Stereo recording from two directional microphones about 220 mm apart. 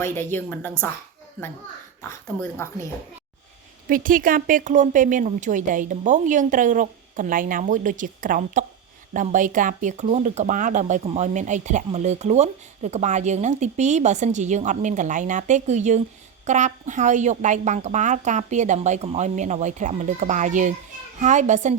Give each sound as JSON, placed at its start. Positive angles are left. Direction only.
{"t": 0.0, "sound": "a woman's voice", "side_deg": 10}
{"t": 2.0, "sound": "a woman's voice", "side_deg": 10}
{"t": 3.8, "sound": "speech", "side_deg": -40}